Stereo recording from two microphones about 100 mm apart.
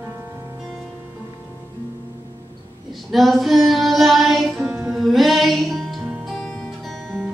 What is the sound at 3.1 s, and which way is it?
Music, centre (ahead or behind).